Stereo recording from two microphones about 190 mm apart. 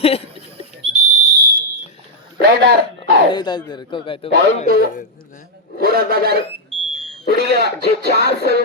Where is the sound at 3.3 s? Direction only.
25° left (ahead or behind).